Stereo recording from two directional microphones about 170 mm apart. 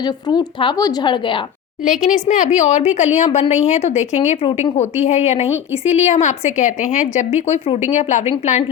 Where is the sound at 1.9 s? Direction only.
50° left (ahead or behind).